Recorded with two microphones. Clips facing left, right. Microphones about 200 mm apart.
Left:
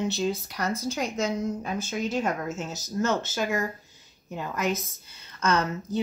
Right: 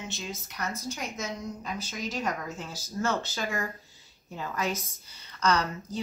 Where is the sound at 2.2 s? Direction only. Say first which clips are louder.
Left 4 dB; 25° left (ahead or behind).